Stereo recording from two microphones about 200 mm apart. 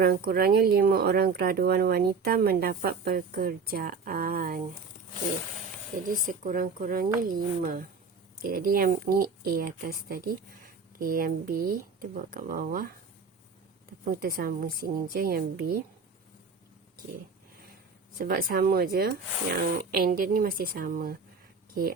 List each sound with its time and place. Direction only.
0.0 s speech: 50° right (ahead or behind)
6.2 s speech: 40° right (ahead or behind)
14.0 s speech: 45° right (ahead or behind)
18.2 s speech: 50° right (ahead or behind)